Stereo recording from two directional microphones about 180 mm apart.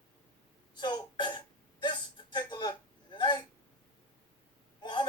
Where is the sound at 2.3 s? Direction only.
25° left (ahead or behind).